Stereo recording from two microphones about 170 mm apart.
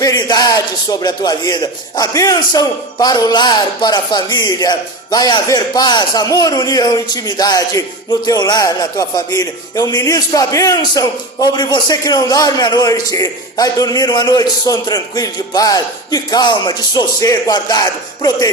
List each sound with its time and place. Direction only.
0.0 s a man's voice: 25° left (ahead or behind)